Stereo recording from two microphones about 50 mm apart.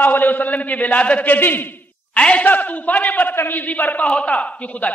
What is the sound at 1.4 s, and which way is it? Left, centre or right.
Speech, left.